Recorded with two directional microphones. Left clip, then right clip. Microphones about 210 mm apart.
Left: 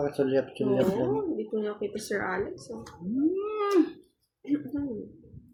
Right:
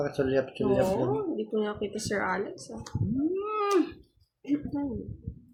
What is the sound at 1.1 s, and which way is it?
A woman's voice, 40° right (ahead or behind).